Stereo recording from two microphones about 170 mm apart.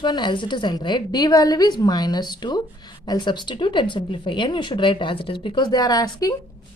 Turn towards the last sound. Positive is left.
turn(degrees=20)  # may be behind; listen again after turning